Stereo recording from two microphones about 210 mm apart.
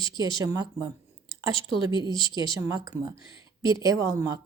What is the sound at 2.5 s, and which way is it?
A woman's voice, 15° right (ahead or behind).